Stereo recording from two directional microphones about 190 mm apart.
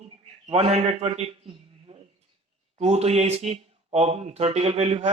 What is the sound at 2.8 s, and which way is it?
Speech, 35° right (ahead or behind).